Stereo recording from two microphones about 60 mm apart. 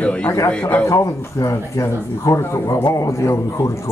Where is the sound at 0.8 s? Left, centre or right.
Left.